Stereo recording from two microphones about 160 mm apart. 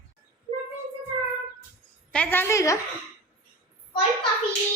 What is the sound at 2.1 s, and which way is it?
Speech, 10° left (ahead or behind).